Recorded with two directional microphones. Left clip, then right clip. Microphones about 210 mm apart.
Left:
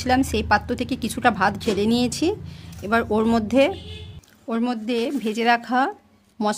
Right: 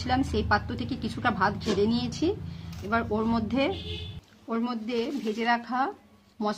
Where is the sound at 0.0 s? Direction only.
45° left (ahead or behind).